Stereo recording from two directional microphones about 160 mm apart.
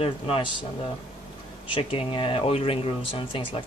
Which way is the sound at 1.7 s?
35° left (ahead or behind).